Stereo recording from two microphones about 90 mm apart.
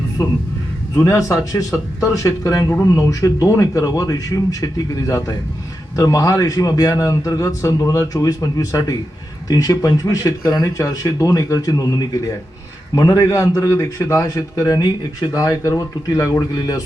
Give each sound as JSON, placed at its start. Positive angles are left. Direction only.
{"t": 1.0, "sound": "a man's voice", "side_deg": 35}